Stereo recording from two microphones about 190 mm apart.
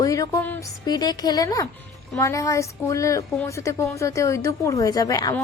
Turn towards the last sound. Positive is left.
turn(degrees=20)  # may be behind; listen again after turning